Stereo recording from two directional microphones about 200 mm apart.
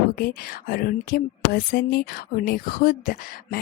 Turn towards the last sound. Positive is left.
turn(degrees=45)  # may be behind; listen again after turning